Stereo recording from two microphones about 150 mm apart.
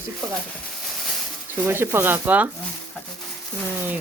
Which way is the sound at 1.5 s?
15° right (ahead or behind).